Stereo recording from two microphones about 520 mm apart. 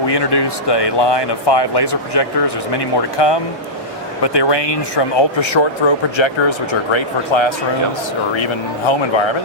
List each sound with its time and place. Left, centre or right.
0.0 s speech: left
8.9 s speech: left